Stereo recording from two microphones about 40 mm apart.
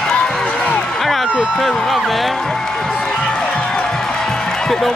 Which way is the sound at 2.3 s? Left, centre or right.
Centre.